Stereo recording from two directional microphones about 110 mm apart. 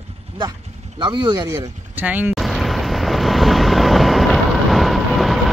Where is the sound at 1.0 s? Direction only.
40° right (ahead or behind).